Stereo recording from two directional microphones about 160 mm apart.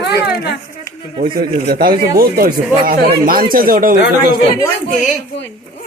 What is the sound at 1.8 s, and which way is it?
Speech, 65° right (ahead or behind).